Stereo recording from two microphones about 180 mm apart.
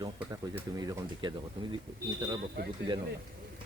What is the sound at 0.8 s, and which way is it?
Speech, 25° right (ahead or behind).